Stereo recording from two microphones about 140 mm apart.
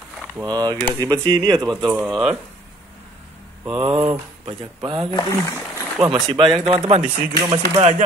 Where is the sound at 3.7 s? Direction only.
40° right (ahead or behind).